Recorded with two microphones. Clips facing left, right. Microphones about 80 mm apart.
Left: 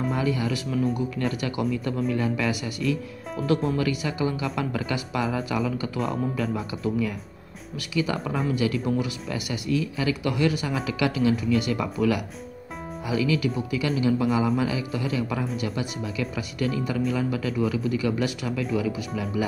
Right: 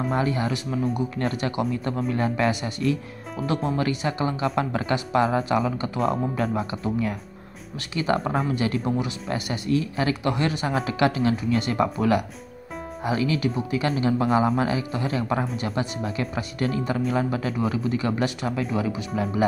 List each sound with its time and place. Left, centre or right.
0.1 s speech: right